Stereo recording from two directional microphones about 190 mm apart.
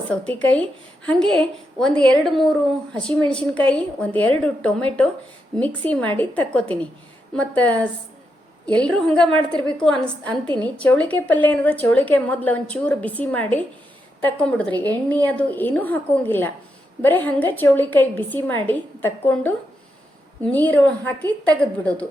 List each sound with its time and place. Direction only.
0.4 s a woman's voice: 5° left (ahead or behind)
10.4 s a woman's voice: 25° right (ahead or behind)
10.8 s a woman's voice: 5° left (ahead or behind)